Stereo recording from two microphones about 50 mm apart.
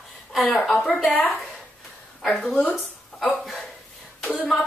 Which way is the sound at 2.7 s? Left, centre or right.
Centre.